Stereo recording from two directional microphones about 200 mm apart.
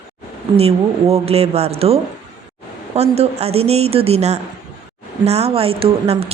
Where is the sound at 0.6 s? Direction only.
30° right (ahead or behind).